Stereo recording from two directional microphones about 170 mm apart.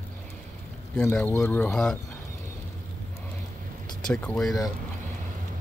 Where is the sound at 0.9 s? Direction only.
10° left (ahead or behind).